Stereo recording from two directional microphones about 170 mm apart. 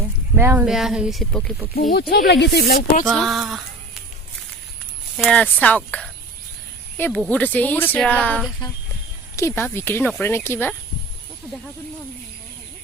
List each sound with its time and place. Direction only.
0.3 s speech: 15° right (ahead or behind)
0.7 s speech: centre (ahead or behind)
1.7 s speech: 60° left (ahead or behind)
3.1 s speech: centre (ahead or behind)
5.1 s speech: 5° left (ahead or behind)
9.3 s speech: 15° left (ahead or behind)